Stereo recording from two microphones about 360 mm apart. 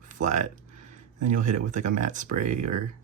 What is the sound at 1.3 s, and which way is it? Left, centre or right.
Speech, right.